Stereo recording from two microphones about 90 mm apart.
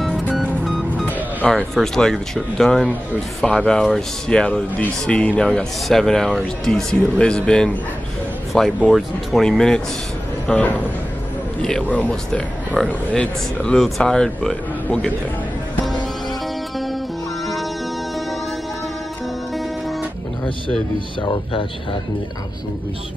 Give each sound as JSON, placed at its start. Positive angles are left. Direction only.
{"t": 0.0, "sound": "music", "side_deg": 0}
{"t": 1.5, "sound": "speech", "side_deg": 5}
{"t": 10.4, "sound": "speech", "side_deg": 15}
{"t": 12.8, "sound": "speech", "side_deg": -10}
{"t": 13.1, "sound": "speech", "side_deg": 10}